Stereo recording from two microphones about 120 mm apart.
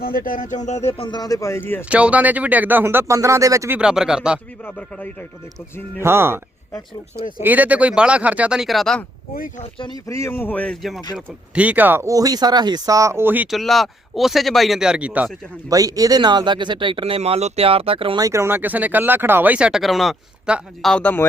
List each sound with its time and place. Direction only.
0.3 s speech: 90° left
0.9 s speech: 45° left (ahead or behind); by 1.8 s 20° left (ahead or behind)
1.9 s speech: 10° right (ahead or behind); by 3.7 s 25° right (ahead or behind)
3.7 s speech: 10° right (ahead or behind)
6.0 s speech: 20° right (ahead or behind)
7.4 s speech: 15° right (ahead or behind)
9.7 s speech: 45° left (ahead or behind)
10.1 s speech: 25° left (ahead or behind)
11.5 s speech: 10° right (ahead or behind)
13.5 s speech: centre (ahead or behind)
15.7 s speech: 30° right (ahead or behind); by 18.2 s 50° right (ahead or behind)
18.2 s speech: 25° right (ahead or behind); by 21.2 s 10° left (ahead or behind)